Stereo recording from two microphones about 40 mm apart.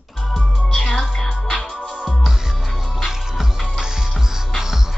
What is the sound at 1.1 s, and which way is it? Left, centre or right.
Music, left.